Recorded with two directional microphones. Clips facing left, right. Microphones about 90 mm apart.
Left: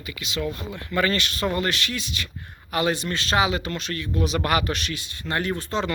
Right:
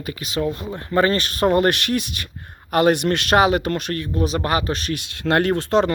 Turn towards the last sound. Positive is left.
turn(degrees=-65)  # may be behind; listen again after turning